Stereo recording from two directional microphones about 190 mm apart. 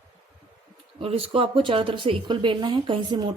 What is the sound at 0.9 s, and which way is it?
Speech, 30° right (ahead or behind).